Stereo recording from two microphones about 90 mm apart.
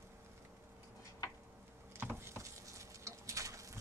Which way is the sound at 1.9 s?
25° right (ahead or behind).